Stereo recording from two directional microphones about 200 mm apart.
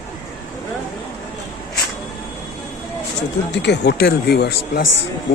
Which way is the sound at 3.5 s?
60° left (ahead or behind).